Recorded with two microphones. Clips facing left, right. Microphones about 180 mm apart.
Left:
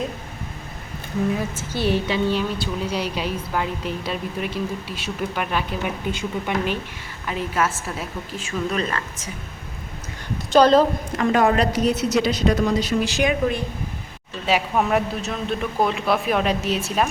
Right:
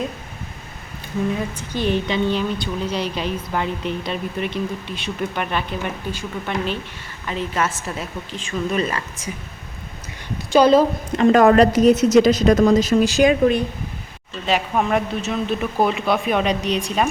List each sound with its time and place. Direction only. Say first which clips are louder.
1.5 s a woman's voice: right 1 dB; 5° left (ahead or behind)
6.1 s a woman's voice: left 2 dB; 15° left (ahead or behind)
8.7 s a woman's voice: right 3 dB; 10° right (ahead or behind)
10.5 s a woman's voice: right 1 dB; 10° right (ahead or behind)
11.3 s a woman's voice: right 6 dB; 45° right (ahead or behind)
14.4 s a woman's voice: even; 5° left (ahead or behind)